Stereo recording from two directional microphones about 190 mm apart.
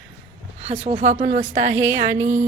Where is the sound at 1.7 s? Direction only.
10° right (ahead or behind).